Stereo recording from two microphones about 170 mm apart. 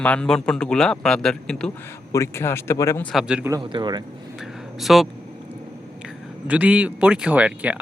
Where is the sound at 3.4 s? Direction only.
25° right (ahead or behind).